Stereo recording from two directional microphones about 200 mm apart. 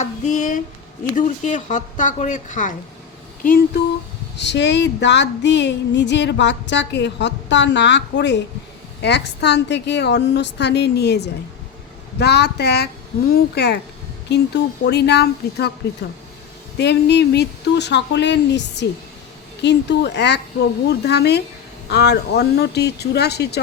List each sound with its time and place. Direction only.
0.0 s speech: 40° left (ahead or behind)
4.4 s female singing: 60° left (ahead or behind)
16.7 s female singing: 55° left (ahead or behind)